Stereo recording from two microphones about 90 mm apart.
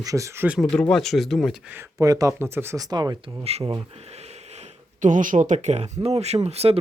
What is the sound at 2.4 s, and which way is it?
Speech, 25° right (ahead or behind).